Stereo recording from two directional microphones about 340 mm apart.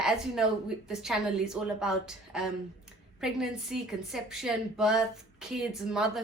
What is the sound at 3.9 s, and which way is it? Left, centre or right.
A woman's voice, centre.